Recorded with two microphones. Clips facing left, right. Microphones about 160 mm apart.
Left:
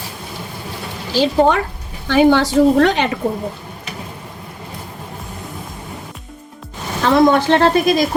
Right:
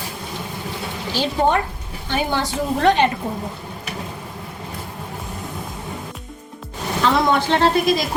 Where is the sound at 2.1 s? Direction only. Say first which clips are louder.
Left 10 dB; 90° left.